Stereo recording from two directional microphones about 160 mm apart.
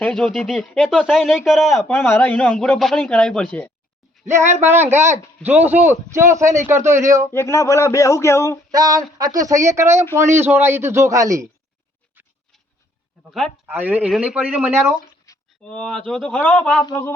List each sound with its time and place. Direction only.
0.0 s speech: 5° left (ahead or behind)
1.8 s a man's voice: 15° left (ahead or behind)
4.4 s speech: 45° right (ahead or behind)
4.7 s speech: 15° right (ahead or behind)
7.3 s a man's voice: 15° left (ahead or behind)
8.7 s speech: 25° right (ahead or behind)
12.1 s a sound: 10° right (ahead or behind)
13.7 s speech: 10° right (ahead or behind)
15.3 s a sound: 20° left (ahead or behind)
15.6 s a man's voice: 5° left (ahead or behind)